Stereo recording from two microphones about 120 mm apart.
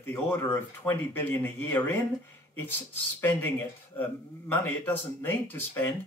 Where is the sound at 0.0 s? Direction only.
15° left (ahead or behind).